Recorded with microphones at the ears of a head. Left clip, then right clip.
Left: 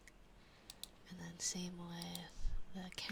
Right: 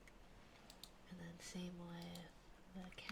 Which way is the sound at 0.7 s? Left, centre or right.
Left.